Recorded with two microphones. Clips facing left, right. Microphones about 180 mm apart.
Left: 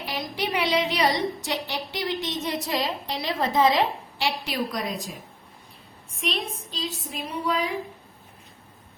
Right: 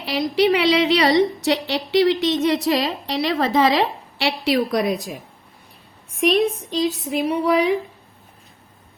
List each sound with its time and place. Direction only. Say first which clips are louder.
0.0 s a woman's voice: right 11 dB; 75° right (ahead or behind)
6.1 s a woman's voice: right 13 dB; 70° right (ahead or behind)